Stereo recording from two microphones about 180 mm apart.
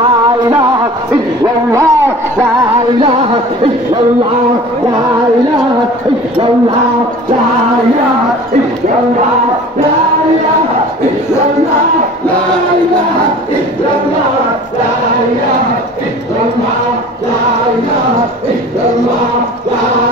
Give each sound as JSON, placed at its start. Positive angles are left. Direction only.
{"t": 1.4, "sound": "speech", "side_deg": -15}